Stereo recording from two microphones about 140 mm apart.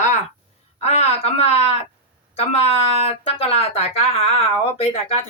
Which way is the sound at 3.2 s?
45° left (ahead or behind).